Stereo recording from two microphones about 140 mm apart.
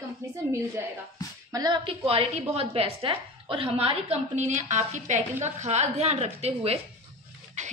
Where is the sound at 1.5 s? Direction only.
30° right (ahead or behind); by 6.7 s 50° right (ahead or behind).